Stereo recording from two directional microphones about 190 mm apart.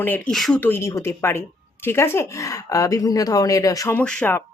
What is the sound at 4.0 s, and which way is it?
Speech, 5° left (ahead or behind).